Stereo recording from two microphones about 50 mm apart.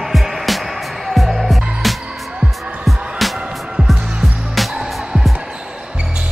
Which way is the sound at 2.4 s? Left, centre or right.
Centre.